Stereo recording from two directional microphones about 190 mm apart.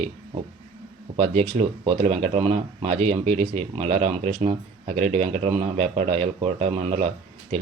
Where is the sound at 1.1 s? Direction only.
30° right (ahead or behind).